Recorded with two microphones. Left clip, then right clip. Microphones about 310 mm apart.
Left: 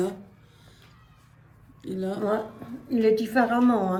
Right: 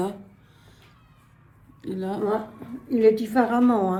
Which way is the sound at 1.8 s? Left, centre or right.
Right.